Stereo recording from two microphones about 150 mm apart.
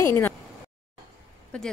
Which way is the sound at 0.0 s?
20° left (ahead or behind).